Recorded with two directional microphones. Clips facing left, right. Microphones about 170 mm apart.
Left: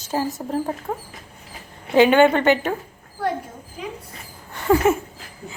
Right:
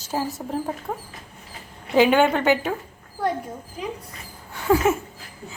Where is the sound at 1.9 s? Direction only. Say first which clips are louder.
Left 3 dB; 5° right (ahead or behind).